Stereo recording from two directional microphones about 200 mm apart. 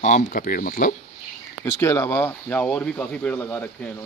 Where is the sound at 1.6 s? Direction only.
15° left (ahead or behind).